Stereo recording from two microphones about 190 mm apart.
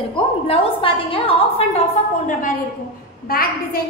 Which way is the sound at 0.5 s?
30° left (ahead or behind).